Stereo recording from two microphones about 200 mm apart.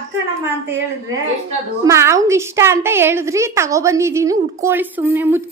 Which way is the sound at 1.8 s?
15° right (ahead or behind).